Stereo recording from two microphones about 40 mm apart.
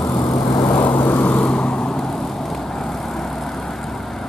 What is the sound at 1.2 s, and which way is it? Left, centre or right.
Vehicle, left.